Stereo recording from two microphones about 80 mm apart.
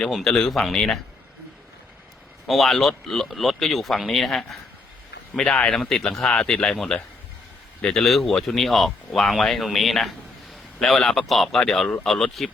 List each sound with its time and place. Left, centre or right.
0.1 s speech: centre
2.5 s speech: centre